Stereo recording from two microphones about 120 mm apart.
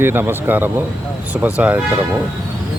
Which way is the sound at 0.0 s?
20° right (ahead or behind).